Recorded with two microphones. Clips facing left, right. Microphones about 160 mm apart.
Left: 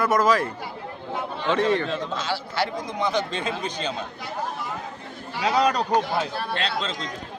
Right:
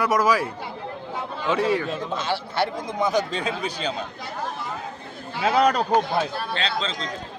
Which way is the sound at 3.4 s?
10° right (ahead or behind).